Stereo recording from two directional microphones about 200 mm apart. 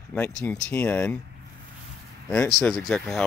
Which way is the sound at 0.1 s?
5° left (ahead or behind).